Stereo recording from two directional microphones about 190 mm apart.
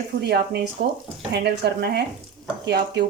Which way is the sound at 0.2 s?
60° right (ahead or behind).